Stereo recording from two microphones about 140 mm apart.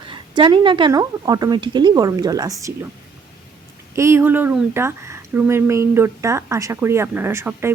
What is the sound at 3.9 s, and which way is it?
Speech, 20° right (ahead or behind).